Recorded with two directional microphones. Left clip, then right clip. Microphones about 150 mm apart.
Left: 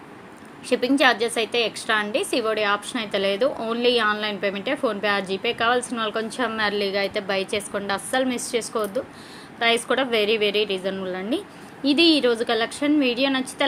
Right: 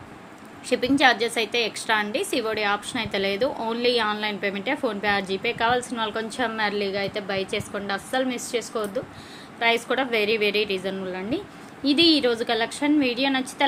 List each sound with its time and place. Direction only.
0.7 s a woman's voice: 10° left (ahead or behind)